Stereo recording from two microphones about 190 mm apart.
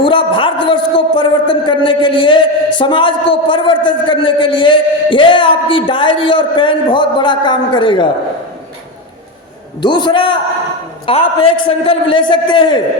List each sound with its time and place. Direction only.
0.0 s a man's voice: 25° left (ahead or behind)
9.8 s a man's voice: 25° left (ahead or behind)